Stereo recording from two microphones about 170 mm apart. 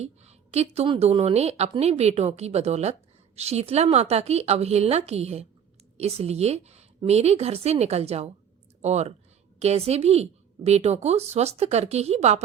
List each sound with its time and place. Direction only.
0.0 s a woman's voice: 40° right (ahead or behind)